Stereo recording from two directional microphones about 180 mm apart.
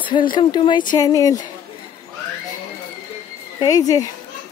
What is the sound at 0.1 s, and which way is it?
Speech, 25° left (ahead or behind).